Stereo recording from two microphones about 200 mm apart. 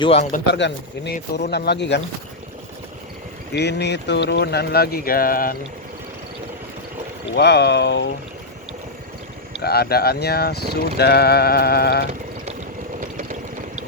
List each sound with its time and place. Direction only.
0.0 s speech: 30° left (ahead or behind)
0.5 s speech: 60° left (ahead or behind)
3.5 s speech: 55° left (ahead or behind)
7.3 s speech: 55° left (ahead or behind)
9.6 s speech: 50° left (ahead or behind)
13.0 s vehicle: 45° right (ahead or behind)